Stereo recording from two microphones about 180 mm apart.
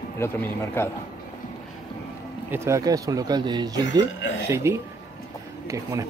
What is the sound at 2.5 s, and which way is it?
Speech, 15° right (ahead or behind).